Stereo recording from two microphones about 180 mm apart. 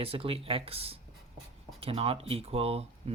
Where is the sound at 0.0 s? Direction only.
30° right (ahead or behind).